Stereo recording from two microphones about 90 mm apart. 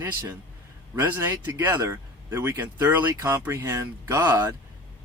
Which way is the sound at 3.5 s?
35° right (ahead or behind).